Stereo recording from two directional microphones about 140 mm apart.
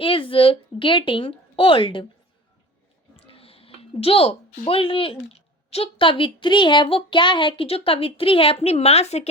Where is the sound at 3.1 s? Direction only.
45° left (ahead or behind).